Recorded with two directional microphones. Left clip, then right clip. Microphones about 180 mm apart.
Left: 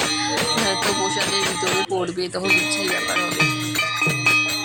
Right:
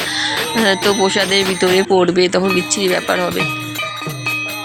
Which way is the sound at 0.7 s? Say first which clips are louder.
Right 7 dB; 20° right (ahead or behind).